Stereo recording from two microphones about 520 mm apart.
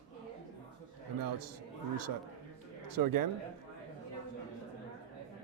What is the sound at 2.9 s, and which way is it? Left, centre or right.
Speech, right.